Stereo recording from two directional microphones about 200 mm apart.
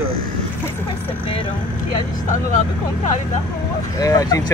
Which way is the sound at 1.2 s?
25° left (ahead or behind).